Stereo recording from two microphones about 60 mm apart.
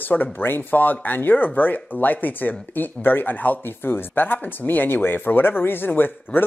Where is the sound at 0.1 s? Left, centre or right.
Left.